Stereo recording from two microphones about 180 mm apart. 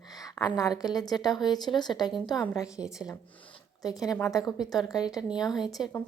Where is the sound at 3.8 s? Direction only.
20° left (ahead or behind).